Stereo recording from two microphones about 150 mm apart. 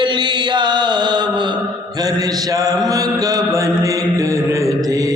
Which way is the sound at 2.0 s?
25° right (ahead or behind).